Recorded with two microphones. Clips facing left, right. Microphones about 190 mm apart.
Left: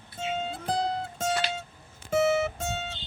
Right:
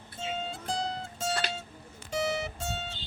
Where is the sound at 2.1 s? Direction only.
50° left (ahead or behind).